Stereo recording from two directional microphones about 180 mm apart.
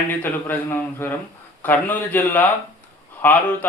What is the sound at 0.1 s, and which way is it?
Speech, 10° left (ahead or behind).